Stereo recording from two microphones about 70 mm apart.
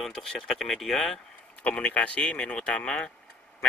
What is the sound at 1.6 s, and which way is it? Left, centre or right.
Speech, centre.